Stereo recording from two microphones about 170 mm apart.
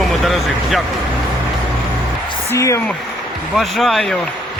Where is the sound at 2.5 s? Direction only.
20° left (ahead or behind).